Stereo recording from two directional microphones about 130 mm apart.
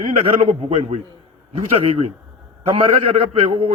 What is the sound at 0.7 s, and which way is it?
A man's voice, 60° right (ahead or behind).